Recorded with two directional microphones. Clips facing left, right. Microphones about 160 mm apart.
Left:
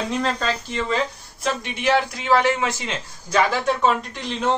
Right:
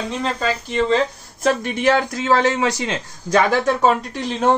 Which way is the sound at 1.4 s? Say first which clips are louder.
Right 6 dB; 45° right (ahead or behind).